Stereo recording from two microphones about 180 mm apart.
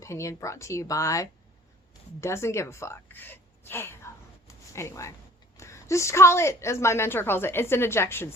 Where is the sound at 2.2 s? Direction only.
15° left (ahead or behind).